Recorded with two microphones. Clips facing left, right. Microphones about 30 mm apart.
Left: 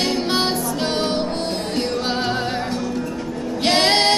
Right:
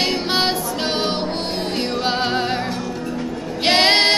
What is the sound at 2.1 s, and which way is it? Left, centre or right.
Music, right.